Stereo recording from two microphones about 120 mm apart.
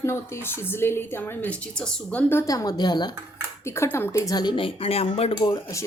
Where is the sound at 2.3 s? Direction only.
25° left (ahead or behind).